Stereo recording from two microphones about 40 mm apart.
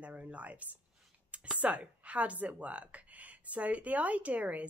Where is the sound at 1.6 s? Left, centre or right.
Right.